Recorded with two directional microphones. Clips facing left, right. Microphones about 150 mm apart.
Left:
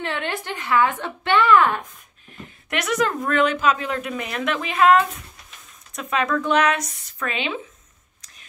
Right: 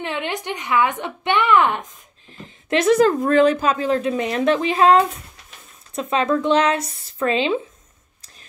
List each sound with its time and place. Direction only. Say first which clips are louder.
0.0 s a woman's voice: right 1 dB; 15° right (ahead or behind)